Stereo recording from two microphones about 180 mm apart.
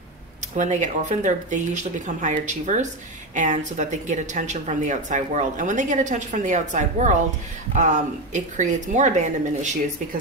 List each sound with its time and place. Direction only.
0.6 s a woman's voice: 40° right (ahead or behind)